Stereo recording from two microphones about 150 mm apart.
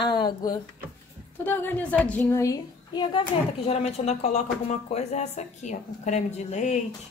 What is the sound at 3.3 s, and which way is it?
Speech, 35° left (ahead or behind).